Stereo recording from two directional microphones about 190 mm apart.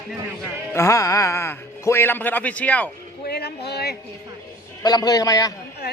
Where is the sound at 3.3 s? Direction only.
60° left (ahead or behind).